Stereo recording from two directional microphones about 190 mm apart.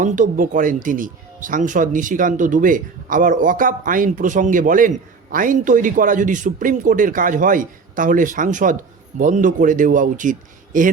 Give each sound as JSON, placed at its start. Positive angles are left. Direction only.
{"t": 0.0, "sound": "a man's voice", "side_deg": -45}